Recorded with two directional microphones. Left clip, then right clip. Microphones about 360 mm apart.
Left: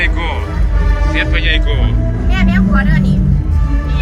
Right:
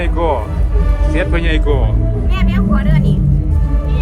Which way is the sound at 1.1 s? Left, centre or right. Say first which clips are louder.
Left 2 dB; centre.